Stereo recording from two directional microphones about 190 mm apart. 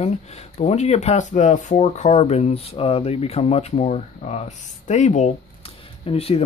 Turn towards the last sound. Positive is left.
turn(degrees=30)  # may be behind; listen again after turning